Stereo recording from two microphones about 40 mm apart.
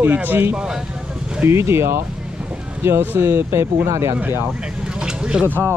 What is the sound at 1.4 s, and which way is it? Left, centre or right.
Speech, right.